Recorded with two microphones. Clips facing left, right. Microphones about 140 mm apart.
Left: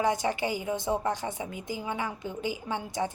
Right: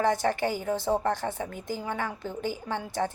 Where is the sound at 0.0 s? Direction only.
15° left (ahead or behind).